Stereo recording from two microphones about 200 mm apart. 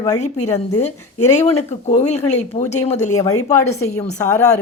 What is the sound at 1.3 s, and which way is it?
Speech, 35° left (ahead or behind).